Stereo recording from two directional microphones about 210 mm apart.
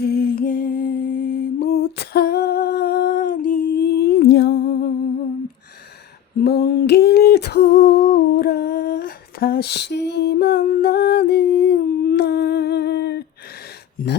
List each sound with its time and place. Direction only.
0.0 s music: 45° left (ahead or behind)
6.4 s a sound: 50° left (ahead or behind)
14.0 s speech: 45° left (ahead or behind)